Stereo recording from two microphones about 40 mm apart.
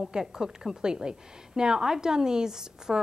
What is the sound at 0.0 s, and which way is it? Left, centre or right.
A woman's voice, centre.